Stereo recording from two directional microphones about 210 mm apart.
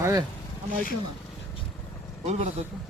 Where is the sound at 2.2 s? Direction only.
30° right (ahead or behind).